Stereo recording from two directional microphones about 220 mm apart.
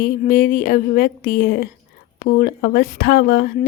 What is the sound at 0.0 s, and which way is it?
A woman's voice, 40° left (ahead or behind).